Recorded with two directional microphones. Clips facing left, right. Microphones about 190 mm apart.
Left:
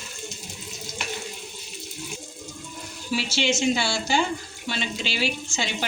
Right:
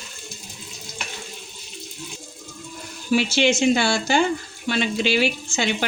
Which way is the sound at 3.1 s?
55° right (ahead or behind).